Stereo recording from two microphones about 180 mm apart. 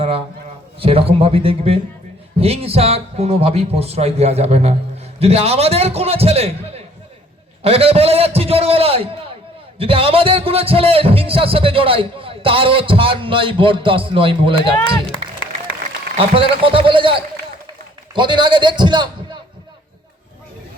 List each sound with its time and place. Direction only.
0.8 s speech: 30° right (ahead or behind)
16.1 s speech: 30° right (ahead or behind)